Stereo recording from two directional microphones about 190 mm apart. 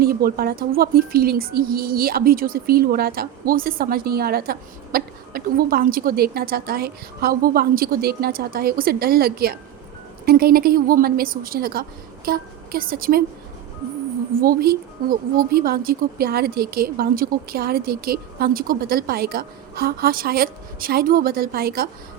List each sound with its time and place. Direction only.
0.0 s speech: 50° right (ahead or behind)
14.4 s speech: 50° right (ahead or behind)